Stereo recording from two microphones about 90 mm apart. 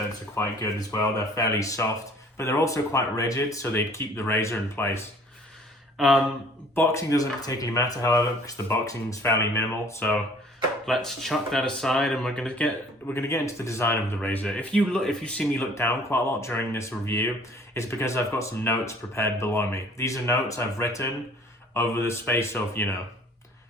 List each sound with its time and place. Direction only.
0.3 s speech: 35° left (ahead or behind)
6.0 s speech: 5° right (ahead or behind)
6.7 s speech: 35° left (ahead or behind)
10.8 s speech: 5° left (ahead or behind)
13.1 s speech: 30° left (ahead or behind); by 15.6 s 10° left (ahead or behind)
15.7 s speech: 30° left (ahead or behind)